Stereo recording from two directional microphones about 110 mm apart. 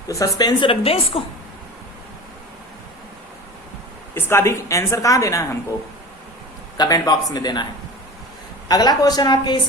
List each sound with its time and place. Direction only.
0.1 s speech: 35° left (ahead or behind)
0.7 s a woman's voice: 60° left (ahead or behind)
4.1 s a woman's voice: 25° left (ahead or behind)
6.7 s speech: 35° left (ahead or behind)